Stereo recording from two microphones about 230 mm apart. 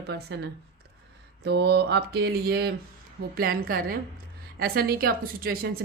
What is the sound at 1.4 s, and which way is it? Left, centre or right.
A woman's voice, right.